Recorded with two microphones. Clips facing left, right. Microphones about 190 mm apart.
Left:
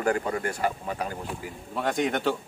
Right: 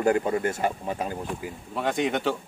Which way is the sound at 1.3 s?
Centre (ahead or behind).